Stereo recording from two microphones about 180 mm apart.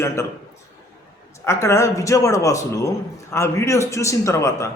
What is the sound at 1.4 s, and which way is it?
Speech, 15° left (ahead or behind).